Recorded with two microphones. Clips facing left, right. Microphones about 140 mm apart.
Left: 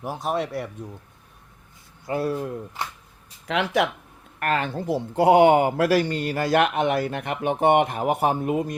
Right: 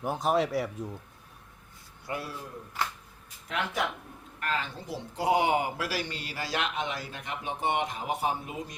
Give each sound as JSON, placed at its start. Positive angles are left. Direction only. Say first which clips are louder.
{"t": 0.0, "sound": "speech", "louder": "even", "side_deg": 0}
{"t": 2.2, "sound": "speech", "louder": "left 14 dB", "side_deg": 60}
{"t": 3.4, "sound": "speech", "louder": "left 9 dB", "side_deg": 85}
{"t": 4.4, "sound": "speech", "louder": "left 8 dB", "side_deg": 65}